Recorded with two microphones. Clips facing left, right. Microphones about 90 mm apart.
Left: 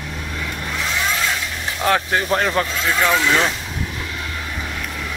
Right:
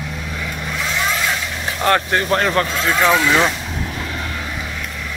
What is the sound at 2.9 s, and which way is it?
Speech, 15° right (ahead or behind).